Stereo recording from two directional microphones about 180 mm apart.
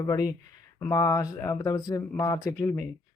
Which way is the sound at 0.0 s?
20° left (ahead or behind).